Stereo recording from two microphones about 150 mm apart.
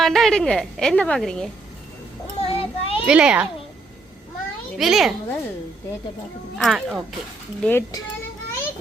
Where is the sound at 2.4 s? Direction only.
40° left (ahead or behind).